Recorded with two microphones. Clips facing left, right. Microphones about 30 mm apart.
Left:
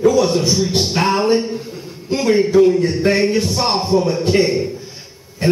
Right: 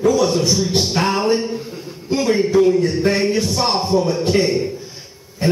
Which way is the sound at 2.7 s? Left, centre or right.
Centre.